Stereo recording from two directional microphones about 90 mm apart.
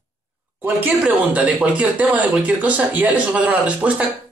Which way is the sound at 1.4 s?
15° right (ahead or behind).